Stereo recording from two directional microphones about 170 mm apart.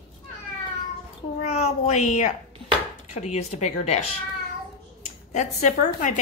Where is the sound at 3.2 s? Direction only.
40° left (ahead or behind).